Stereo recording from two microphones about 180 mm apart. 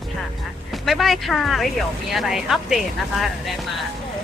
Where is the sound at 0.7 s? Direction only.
Centre (ahead or behind).